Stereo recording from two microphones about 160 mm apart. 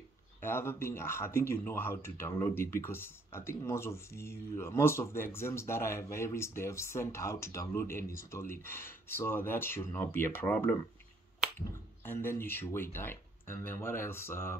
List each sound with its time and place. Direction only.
0.4 s speech: 15° left (ahead or behind)
12.0 s speech: 15° left (ahead or behind)